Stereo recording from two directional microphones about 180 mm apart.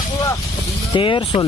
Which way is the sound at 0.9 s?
30° left (ahead or behind).